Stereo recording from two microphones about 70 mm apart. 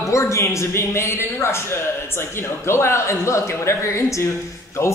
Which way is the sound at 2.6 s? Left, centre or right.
Left.